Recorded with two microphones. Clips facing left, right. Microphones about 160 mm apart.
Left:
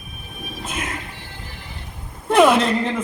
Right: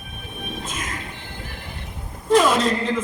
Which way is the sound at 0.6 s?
60° left (ahead or behind).